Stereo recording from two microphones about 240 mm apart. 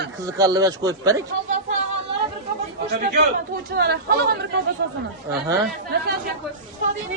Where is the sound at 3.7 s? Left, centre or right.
Right.